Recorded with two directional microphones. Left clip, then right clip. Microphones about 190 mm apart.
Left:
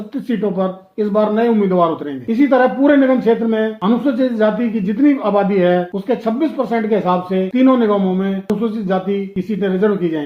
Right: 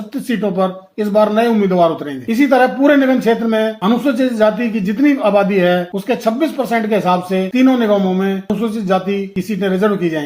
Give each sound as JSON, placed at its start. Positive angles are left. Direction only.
{"t": 0.3, "sound": "speech", "side_deg": -40}